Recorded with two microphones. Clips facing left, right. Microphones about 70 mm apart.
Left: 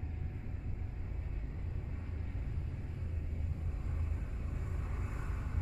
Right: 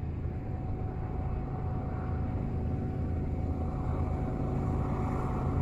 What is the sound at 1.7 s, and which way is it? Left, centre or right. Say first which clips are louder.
Vehicle: right 11 dB; right.